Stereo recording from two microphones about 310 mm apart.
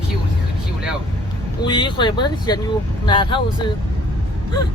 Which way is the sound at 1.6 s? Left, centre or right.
Centre.